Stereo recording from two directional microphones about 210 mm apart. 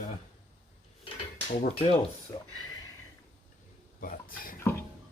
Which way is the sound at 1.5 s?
30° left (ahead or behind).